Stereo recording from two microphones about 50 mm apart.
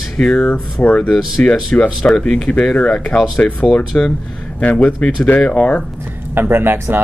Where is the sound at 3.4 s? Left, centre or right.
Left.